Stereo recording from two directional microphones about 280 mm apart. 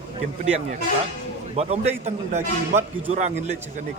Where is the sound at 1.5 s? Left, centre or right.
Right.